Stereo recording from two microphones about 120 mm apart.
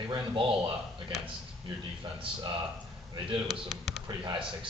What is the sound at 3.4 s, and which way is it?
Speech, centre (ahead or behind).